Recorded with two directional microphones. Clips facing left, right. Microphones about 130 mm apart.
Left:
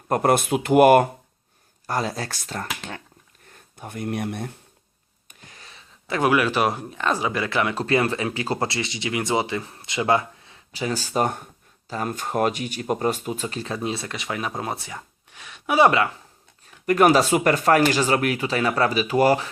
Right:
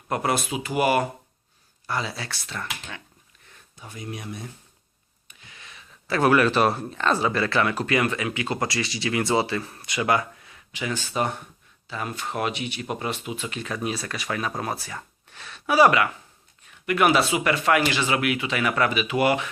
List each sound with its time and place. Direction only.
0.1 s speech: 50° left (ahead or behind)
5.3 s a sound: 45° left (ahead or behind)
6.1 s speech: 15° left (ahead or behind)
16.6 s speech: 40° left (ahead or behind)